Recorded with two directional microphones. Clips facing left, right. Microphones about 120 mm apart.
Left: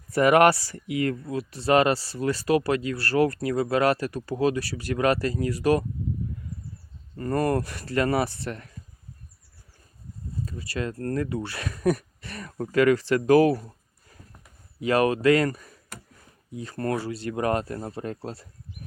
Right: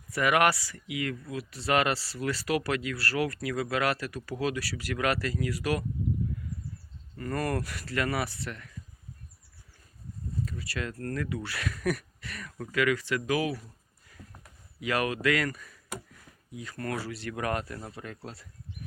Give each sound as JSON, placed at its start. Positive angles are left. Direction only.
{"t": 0.1, "sound": "speech", "side_deg": 35}
{"t": 7.2, "sound": "speech", "side_deg": 30}
{"t": 10.5, "sound": "speech", "side_deg": 25}